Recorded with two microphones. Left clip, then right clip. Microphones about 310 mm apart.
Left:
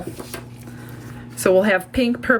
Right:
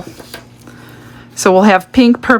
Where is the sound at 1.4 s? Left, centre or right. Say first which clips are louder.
Right 7 dB; centre.